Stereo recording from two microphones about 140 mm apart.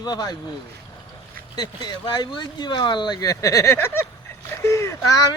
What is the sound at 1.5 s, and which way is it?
Speech, 30° left (ahead or behind).